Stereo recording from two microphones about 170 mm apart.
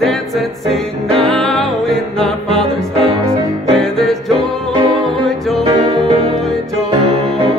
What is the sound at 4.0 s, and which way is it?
Music, centre (ahead or behind).